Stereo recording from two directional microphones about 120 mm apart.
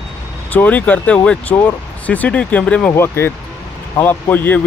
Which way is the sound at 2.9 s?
20° left (ahead or behind).